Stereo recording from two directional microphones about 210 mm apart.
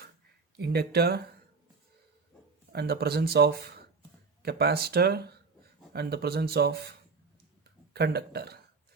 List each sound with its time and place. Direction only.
0.5 s speech: 50° right (ahead or behind)
2.7 s speech: 50° right (ahead or behind)
7.9 s speech: 50° right (ahead or behind)